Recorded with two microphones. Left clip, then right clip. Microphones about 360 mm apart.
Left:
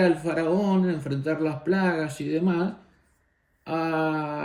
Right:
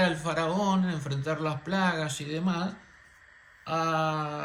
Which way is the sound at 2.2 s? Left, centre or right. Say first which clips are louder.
Left 6 dB; centre.